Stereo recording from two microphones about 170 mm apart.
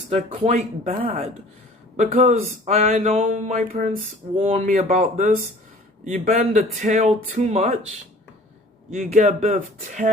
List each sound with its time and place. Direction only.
0.1 s speech: 40° right (ahead or behind)
9.0 s speech: 45° right (ahead or behind)